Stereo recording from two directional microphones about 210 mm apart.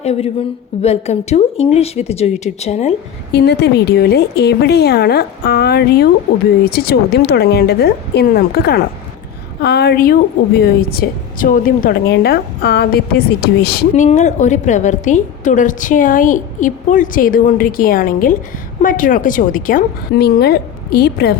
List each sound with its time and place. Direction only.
0.0 s a woman's voice: 30° left (ahead or behind)
3.3 s a woman's voice: 50° left (ahead or behind)
13.9 s a woman's voice: 35° left (ahead or behind)